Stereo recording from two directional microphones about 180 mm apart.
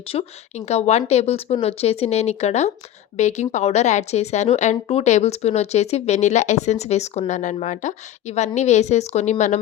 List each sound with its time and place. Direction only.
0.1 s a woman's voice: 35° left (ahead or behind)